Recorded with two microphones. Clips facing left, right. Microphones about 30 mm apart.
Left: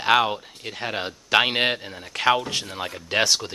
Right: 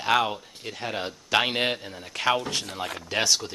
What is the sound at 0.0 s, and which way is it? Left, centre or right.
A man's voice, left.